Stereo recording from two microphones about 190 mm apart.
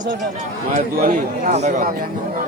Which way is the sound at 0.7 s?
45° right (ahead or behind).